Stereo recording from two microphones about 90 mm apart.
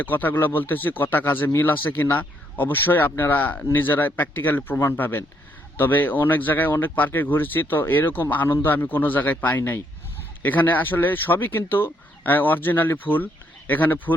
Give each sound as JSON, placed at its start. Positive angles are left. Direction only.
{"t": 0.0, "sound": "speech", "side_deg": 20}